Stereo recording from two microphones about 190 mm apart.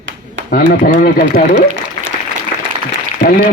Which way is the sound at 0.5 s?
45° left (ahead or behind).